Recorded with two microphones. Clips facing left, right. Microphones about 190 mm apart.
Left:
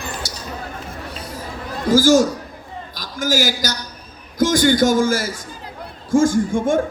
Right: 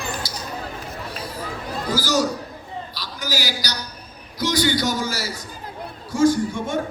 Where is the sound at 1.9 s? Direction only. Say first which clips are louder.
Left 9 dB; 50° left (ahead or behind).